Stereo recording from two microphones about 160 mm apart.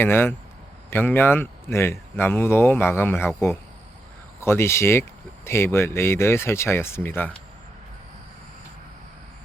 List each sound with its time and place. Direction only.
0.0 s speech: 15° left (ahead or behind)